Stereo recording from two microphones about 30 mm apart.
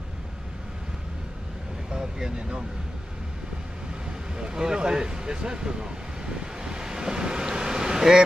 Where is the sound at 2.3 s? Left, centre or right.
Right.